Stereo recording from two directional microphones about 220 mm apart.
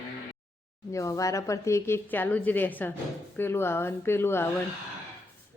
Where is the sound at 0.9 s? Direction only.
15° left (ahead or behind).